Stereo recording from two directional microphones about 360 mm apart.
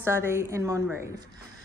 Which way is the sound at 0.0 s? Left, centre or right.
Centre.